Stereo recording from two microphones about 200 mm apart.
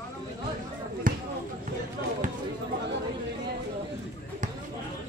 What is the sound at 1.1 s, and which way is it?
Basketball bounce, 45° right (ahead or behind).